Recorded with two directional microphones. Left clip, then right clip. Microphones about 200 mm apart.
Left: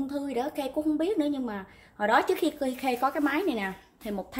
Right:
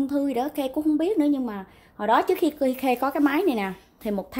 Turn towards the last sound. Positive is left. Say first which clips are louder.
# right 6 dB
turn(degrees=-40)  # may be behind; listen again after turning